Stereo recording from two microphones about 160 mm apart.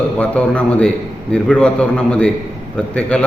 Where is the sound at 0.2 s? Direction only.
5° left (ahead or behind).